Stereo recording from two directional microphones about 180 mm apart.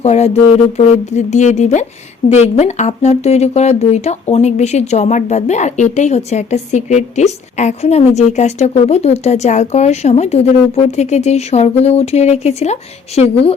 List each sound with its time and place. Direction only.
0.0 s speech: 35° left (ahead or behind)